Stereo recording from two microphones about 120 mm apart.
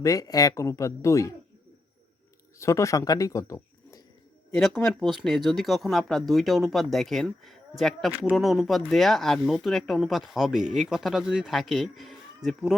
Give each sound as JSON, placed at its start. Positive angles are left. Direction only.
{"t": 0.0, "sound": "speech", "side_deg": 30}
{"t": 2.6, "sound": "speech", "side_deg": 25}
{"t": 5.2, "sound": "speech", "side_deg": 0}